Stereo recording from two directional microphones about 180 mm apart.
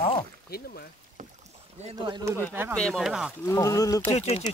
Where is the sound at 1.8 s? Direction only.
25° right (ahead or behind).